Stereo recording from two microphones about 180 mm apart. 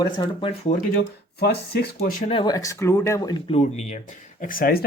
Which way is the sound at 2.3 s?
25° left (ahead or behind).